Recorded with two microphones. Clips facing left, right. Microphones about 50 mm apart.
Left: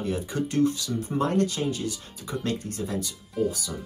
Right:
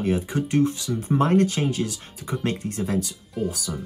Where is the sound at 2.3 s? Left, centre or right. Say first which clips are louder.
Right 3 dB; right.